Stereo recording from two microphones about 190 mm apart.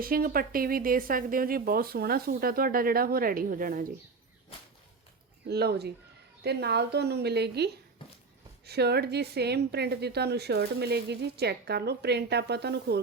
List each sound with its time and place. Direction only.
0.0 s speech: 50° right (ahead or behind)
5.5 s a woman's voice: 55° right (ahead or behind)